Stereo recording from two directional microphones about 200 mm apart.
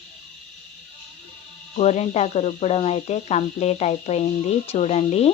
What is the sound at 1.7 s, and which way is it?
Speech, 35° left (ahead or behind).